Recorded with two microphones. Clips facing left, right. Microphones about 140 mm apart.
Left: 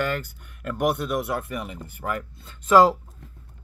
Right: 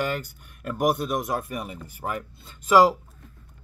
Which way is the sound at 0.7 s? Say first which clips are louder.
Even; 40° right (ahead or behind).